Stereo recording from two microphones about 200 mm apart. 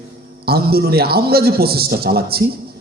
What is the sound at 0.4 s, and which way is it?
A man's voice, 50° right (ahead or behind).